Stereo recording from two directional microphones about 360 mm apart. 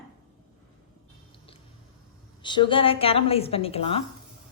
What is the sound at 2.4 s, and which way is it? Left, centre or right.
A woman's voice, centre.